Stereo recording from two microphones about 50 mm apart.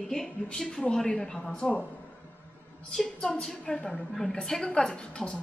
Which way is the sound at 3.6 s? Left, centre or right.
Left.